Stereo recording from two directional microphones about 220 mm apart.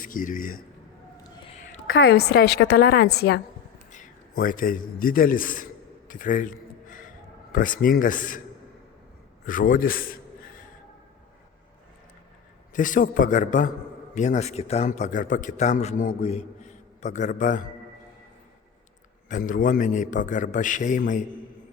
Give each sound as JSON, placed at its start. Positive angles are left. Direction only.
{"t": 0.0, "sound": "a man's voice", "side_deg": 40}
{"t": 2.1, "sound": "a woman's voice", "side_deg": 45}
{"t": 6.1, "sound": "a sound", "side_deg": 35}
{"t": 7.5, "sound": "a man's voice", "side_deg": 40}
{"t": 9.5, "sound": "a man's voice", "side_deg": 40}
{"t": 12.7, "sound": "a man's voice", "side_deg": 35}
{"t": 19.3, "sound": "a man's voice", "side_deg": 40}